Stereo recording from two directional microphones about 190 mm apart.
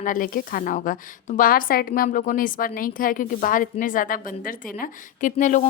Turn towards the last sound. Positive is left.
turn(degrees=40)  # may be behind; listen again after turning